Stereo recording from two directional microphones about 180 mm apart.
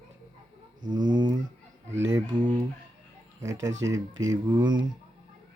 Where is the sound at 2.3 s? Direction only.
25° right (ahead or behind).